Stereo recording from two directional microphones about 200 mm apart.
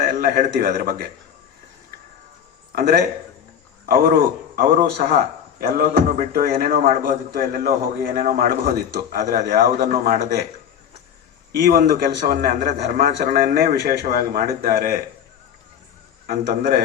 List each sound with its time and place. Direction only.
0.0 s a man's voice: 45° right (ahead or behind)
2.7 s a man's voice: 50° right (ahead or behind)
11.5 s a man's voice: 45° right (ahead or behind)
16.2 s a man's voice: 50° right (ahead or behind)